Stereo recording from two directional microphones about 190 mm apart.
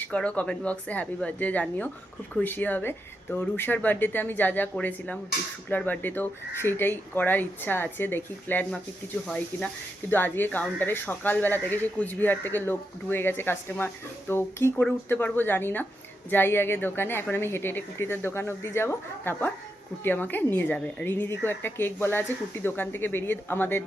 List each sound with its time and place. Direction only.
0.0 s speech: 5° left (ahead or behind)